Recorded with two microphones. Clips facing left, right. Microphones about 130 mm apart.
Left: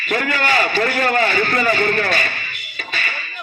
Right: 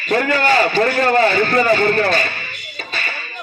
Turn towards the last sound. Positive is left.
turn(degrees=-35)  # may be behind; listen again after turning